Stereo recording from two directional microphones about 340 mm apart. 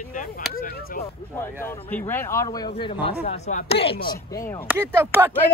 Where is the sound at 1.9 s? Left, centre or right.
Centre.